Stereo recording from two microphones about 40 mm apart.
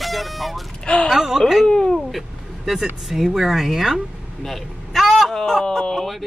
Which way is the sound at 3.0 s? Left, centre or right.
Centre.